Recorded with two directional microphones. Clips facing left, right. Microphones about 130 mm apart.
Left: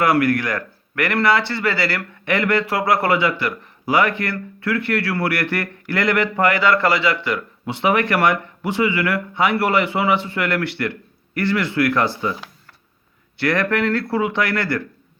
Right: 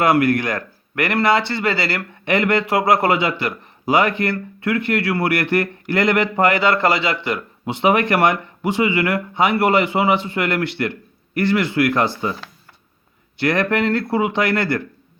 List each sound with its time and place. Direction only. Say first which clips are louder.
0.0 s speech: right 1 dB; 20° right (ahead or behind)
13.3 s speech: right 1 dB; 20° right (ahead or behind)